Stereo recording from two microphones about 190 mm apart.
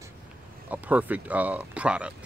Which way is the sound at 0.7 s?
10° right (ahead or behind).